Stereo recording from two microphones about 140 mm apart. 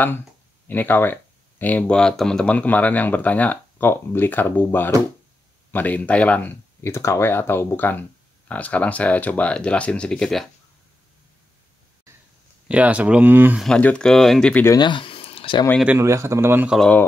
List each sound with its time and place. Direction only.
0.7 s speech: 15° left (ahead or behind)
12.6 s speech: 10° right (ahead or behind)
13.6 s speech: 5° left (ahead or behind)
14.8 s a sound: 35° left (ahead or behind)
16.0 s a man's voice: 20° right (ahead or behind)